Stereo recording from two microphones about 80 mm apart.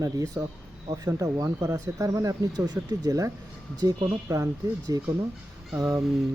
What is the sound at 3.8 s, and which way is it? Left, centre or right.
Speech, right.